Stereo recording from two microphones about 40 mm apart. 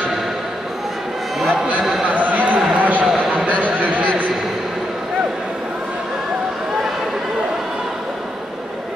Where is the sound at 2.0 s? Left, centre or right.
Right.